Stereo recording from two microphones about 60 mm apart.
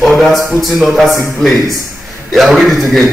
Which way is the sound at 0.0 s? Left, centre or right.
Centre.